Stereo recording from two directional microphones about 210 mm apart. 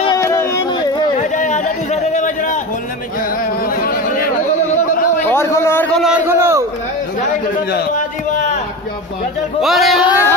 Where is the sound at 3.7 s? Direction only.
45° left (ahead or behind).